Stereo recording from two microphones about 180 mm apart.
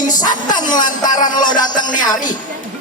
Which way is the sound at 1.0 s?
20° left (ahead or behind).